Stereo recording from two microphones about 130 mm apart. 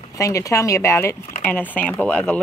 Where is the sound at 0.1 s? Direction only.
25° left (ahead or behind).